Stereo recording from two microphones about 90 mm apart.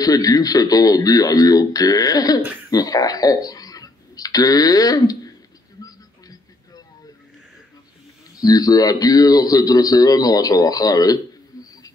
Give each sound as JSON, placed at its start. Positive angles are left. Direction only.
{"t": 0.0, "sound": "a man's voice", "side_deg": 45}
{"t": 5.9, "sound": "a sound", "side_deg": 45}
{"t": 8.4, "sound": "a man's voice", "side_deg": 45}